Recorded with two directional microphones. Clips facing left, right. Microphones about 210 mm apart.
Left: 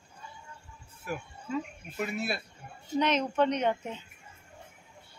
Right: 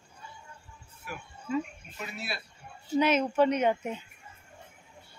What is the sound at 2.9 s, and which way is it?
Speech, 5° right (ahead or behind).